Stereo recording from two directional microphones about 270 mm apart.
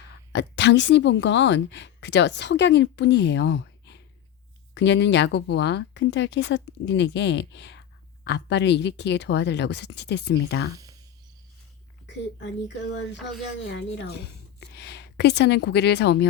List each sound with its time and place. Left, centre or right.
0.3 s speech: left
12.0 s speech: left
14.8 s speech: left